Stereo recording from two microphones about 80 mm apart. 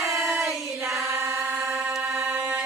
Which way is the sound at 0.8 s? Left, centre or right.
Right.